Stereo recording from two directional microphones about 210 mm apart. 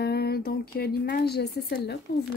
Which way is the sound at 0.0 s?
50° left (ahead or behind).